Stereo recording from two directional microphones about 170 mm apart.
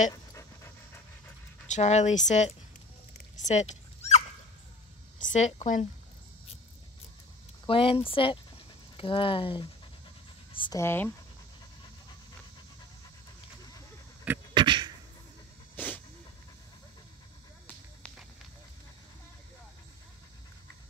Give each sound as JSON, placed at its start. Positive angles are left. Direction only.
{"t": 0.1, "sound": "dog", "side_deg": 20}
{"t": 1.7, "sound": "speech", "side_deg": 40}
{"t": 3.3, "sound": "dog", "side_deg": 45}
{"t": 5.2, "sound": "speech", "side_deg": 45}
{"t": 7.6, "sound": "speech", "side_deg": 30}
{"t": 10.5, "sound": "a sound", "side_deg": 30}
{"t": 10.8, "sound": "speech", "side_deg": 10}
{"t": 14.5, "sound": "a sound", "side_deg": -30}
{"t": 15.7, "sound": "hiss", "side_deg": 10}